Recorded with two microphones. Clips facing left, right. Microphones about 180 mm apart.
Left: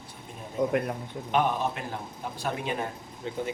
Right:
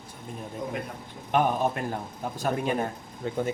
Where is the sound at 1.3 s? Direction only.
50° right (ahead or behind).